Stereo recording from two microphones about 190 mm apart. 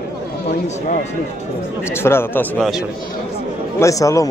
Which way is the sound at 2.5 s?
Centre (ahead or behind).